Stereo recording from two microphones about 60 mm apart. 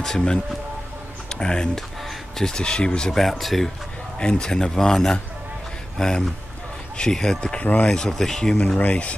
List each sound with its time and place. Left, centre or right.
0.0 s speech: centre
4.2 s speech: centre
7.9 s speech: centre
8.7 s speech: left